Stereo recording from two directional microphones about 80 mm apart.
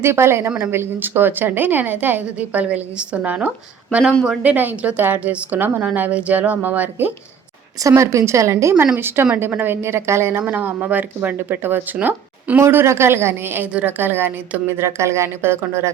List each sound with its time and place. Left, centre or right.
0.0 s a woman's voice: right
7.9 s a woman's voice: right
9.0 s a woman's voice: right
10.4 s a woman's voice: right
12.5 s a woman's voice: right